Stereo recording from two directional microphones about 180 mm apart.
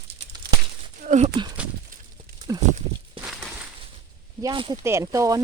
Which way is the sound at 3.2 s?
5° right (ahead or behind).